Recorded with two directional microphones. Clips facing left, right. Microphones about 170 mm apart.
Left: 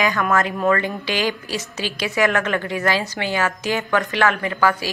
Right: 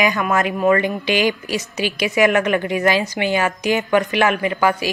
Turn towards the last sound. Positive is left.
turn(degrees=-15)  # may be behind; listen again after turning